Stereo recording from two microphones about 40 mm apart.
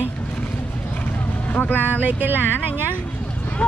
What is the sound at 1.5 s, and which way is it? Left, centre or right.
Speech, left.